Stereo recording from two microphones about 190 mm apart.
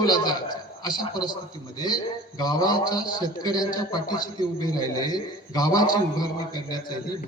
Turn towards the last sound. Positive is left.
turn(degrees=25)  # may be behind; listen again after turning